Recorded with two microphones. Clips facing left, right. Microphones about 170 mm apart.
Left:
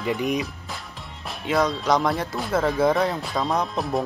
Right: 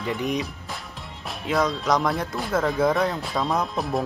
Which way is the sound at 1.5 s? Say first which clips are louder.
Left 1 dB; centre (ahead or behind).